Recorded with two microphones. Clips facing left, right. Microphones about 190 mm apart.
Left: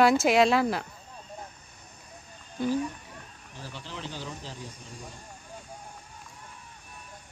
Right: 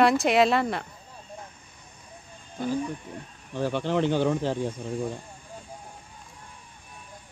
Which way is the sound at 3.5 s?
65° right (ahead or behind).